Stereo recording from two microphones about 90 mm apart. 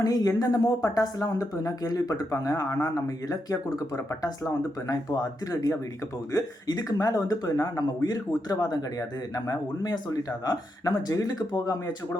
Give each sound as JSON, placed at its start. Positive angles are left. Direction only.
{"t": 0.0, "sound": "speech", "side_deg": 45}